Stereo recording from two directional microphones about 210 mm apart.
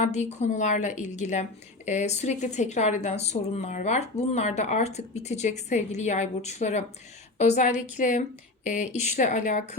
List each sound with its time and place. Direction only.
0.0 s speech: 35° left (ahead or behind)